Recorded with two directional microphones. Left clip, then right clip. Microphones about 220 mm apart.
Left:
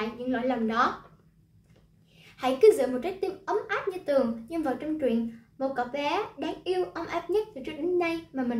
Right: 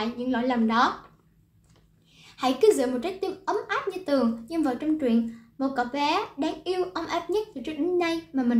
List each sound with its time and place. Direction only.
0.2 s a woman's voice: 20° right (ahead or behind)
2.3 s a woman's voice: 25° right (ahead or behind)